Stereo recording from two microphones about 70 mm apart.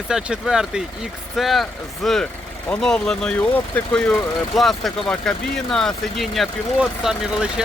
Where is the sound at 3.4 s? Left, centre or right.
Centre.